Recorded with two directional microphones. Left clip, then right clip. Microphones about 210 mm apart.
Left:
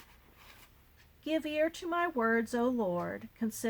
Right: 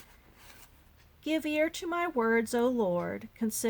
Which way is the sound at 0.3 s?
25° right (ahead or behind).